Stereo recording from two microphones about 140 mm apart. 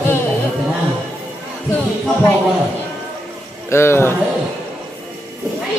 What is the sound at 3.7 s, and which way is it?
Speech, 20° left (ahead or behind).